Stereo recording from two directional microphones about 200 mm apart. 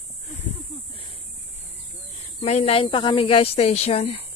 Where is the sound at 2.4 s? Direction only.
30° left (ahead or behind).